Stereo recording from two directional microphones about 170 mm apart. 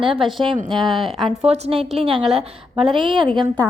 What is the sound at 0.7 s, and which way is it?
Speech, centre (ahead or behind).